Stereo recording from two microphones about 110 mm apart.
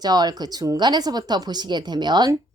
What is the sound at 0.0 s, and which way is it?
A woman's voice, 40° right (ahead or behind).